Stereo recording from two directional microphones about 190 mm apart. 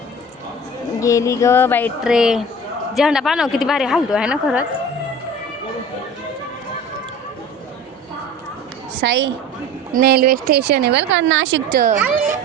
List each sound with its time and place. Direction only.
0.9 s a sound: 15° left (ahead or behind)
2.0 s speech: 5° right (ahead or behind)
9.0 s a woman's voice: 70° right (ahead or behind)
9.9 s speech: 55° right (ahead or behind)
11.1 s a woman's voice: 85° right
11.7 s speech: 50° right (ahead or behind)